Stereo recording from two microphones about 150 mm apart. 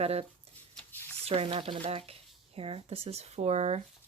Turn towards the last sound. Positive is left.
turn(degrees=-45)  # may be behind; listen again after turning